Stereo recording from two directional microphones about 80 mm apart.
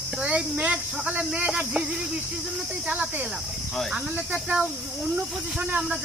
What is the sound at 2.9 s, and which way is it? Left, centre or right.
Speech, centre.